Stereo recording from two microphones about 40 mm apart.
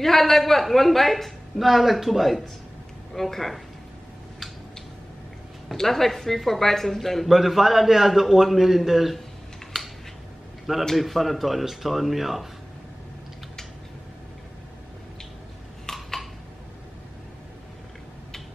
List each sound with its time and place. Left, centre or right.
0.0 s a man's voice: centre
5.8 s speech: centre
7.2 s a man's voice: centre
9.7 s a sound: centre
11.0 s a man's voice: centre
15.9 s a sound: centre